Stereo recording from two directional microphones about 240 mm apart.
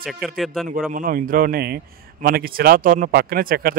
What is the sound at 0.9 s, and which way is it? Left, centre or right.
A man's voice, right.